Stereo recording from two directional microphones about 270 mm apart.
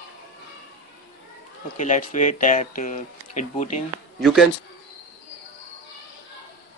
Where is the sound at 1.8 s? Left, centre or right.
Left.